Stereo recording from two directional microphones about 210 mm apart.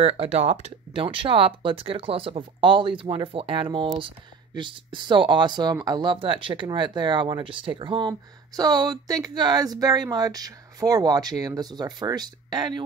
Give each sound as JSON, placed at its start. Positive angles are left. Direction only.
{"t": 0.0, "sound": "speech", "side_deg": -30}